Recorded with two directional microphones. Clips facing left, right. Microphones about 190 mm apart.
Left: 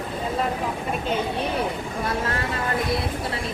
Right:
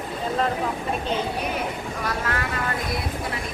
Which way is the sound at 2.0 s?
25° left (ahead or behind).